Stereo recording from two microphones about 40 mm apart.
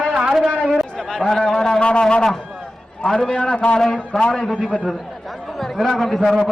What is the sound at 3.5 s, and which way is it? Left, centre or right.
A man's voice, left.